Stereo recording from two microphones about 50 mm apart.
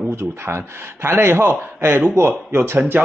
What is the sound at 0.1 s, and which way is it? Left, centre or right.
A man's voice, right.